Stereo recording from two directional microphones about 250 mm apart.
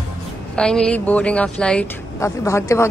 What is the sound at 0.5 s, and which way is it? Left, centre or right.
Speech, centre.